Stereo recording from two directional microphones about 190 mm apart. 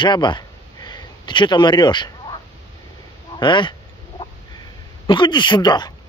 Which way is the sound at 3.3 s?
25° left (ahead or behind).